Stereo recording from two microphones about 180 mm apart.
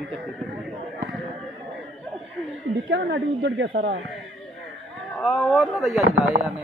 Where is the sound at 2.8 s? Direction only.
80° right.